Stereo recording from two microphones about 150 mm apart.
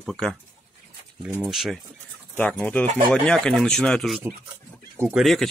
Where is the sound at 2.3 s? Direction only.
10° left (ahead or behind).